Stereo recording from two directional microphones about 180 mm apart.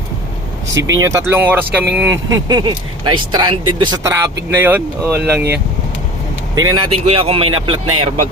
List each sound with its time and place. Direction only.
0.7 s speech: 90° right
1.0 s speech: 15° right (ahead or behind)
6.6 s speech: 25° right (ahead or behind)